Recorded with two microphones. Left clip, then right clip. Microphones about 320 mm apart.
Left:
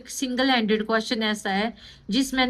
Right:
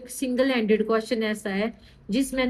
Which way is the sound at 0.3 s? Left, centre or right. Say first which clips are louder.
Even; left.